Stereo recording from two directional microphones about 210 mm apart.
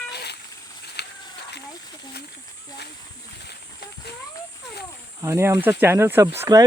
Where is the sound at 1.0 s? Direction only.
50° left (ahead or behind).